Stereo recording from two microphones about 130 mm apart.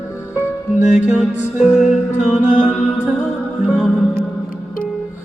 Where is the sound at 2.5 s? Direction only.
70° left (ahead or behind).